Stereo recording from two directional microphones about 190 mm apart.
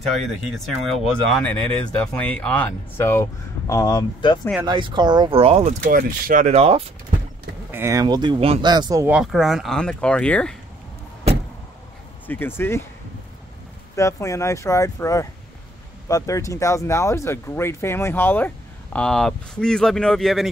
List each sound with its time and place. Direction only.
0.8 s speech: centre (ahead or behind); by 4.4 s 20° left (ahead or behind)
4.6 s speech: 25° right (ahead or behind)
7.7 s speech: 15° right (ahead or behind)
9.0 s speech: 5° right (ahead or behind)
12.3 s speech: 10° left (ahead or behind)
13.9 s speech: 15° left (ahead or behind); by 20.4 s centre (ahead or behind)